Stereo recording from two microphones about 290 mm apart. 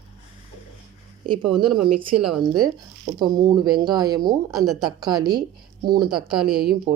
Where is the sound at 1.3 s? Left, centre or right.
Centre.